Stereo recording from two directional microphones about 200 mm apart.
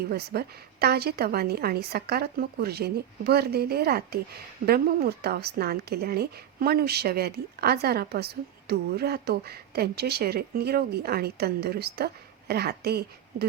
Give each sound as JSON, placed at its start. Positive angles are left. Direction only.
{"t": 0.1, "sound": "a woman's voice", "side_deg": -50}